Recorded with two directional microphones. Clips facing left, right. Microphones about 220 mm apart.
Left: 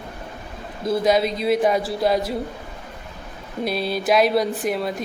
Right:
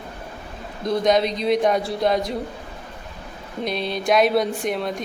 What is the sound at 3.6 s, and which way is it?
A man's voice, 5° left (ahead or behind).